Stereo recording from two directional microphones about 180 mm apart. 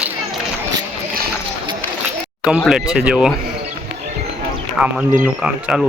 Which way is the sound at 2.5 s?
5° right (ahead or behind).